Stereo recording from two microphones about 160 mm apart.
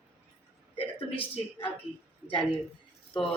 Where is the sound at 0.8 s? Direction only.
35° left (ahead or behind).